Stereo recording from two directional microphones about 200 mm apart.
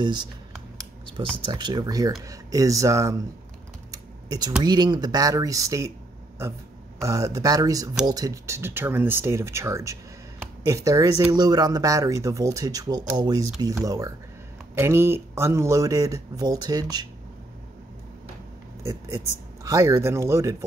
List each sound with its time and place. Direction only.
0.0 s speech: 20° right (ahead or behind)
3.9 s typing: 15° right (ahead or behind)
4.6 s speech: 20° right (ahead or behind)
18.8 s speech: 15° right (ahead or behind)